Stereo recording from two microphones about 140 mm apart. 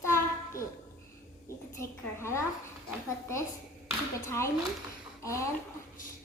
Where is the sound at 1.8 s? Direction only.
20° left (ahead or behind).